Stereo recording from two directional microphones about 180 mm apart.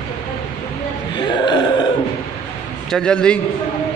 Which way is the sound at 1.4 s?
25° left (ahead or behind).